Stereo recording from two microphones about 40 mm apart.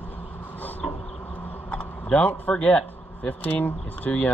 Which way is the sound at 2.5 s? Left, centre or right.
Left.